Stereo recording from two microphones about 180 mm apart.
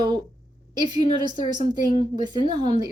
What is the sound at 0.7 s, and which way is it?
A woman's voice, 25° right (ahead or behind).